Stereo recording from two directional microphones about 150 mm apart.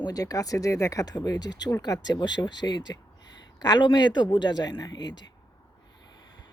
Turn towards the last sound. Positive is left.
turn(degrees=30)  # may be behind; listen again after turning